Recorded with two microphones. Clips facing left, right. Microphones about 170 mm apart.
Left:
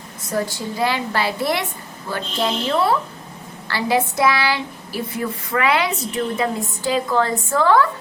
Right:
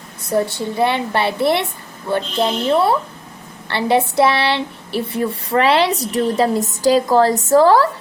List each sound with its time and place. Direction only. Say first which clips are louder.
0.8 s a woman's voice: right 4 dB; 25° right (ahead or behind)